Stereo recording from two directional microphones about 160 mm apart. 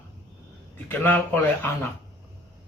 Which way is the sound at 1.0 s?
10° left (ahead or behind).